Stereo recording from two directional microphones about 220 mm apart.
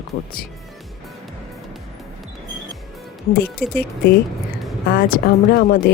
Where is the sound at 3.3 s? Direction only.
45° left (ahead or behind).